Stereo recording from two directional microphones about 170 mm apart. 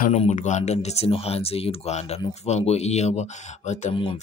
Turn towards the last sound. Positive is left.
turn(degrees=40)  # may be behind; listen again after turning